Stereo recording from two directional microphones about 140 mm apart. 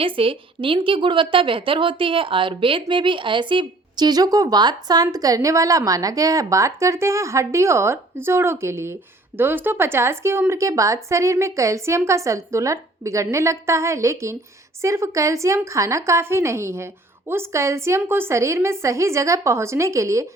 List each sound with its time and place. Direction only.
0.0 s a woman's voice: 40° right (ahead or behind); by 20.2 s 20° right (ahead or behind)